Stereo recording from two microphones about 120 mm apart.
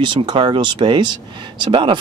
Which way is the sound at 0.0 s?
40° right (ahead or behind).